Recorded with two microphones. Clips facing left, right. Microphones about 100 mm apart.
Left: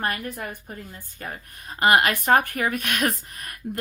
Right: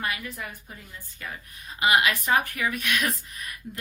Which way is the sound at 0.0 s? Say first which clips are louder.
Left 4 dB; 50° left (ahead or behind).